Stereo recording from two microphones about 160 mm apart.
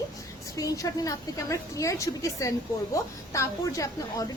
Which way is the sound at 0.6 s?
20° left (ahead or behind).